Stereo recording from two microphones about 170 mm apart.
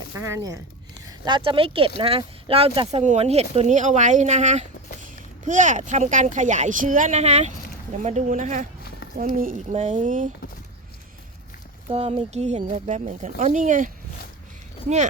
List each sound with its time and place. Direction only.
0.1 s speech: 15° right (ahead or behind); by 10.2 s 50° right (ahead or behind)
11.9 s speech: 35° right (ahead or behind)